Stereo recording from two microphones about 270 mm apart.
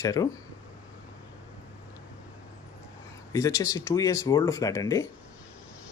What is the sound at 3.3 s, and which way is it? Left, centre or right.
Speech, centre.